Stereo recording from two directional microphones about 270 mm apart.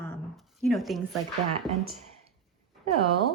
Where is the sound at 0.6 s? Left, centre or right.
Centre.